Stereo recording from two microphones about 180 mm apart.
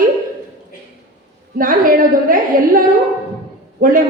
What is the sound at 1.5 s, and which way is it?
A woman's voice, 50° right (ahead or behind).